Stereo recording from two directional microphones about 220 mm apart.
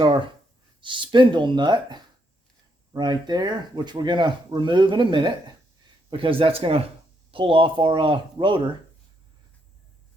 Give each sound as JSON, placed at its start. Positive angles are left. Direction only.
{"t": 0.0, "sound": "speech", "side_deg": -20}